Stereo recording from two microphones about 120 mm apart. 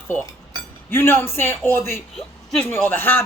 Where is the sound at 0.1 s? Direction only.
20° left (ahead or behind).